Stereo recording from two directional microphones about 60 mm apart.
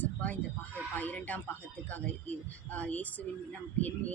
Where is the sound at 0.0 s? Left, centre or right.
Left.